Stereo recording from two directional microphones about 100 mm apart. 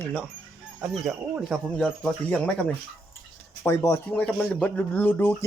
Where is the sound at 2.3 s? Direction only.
15° left (ahead or behind).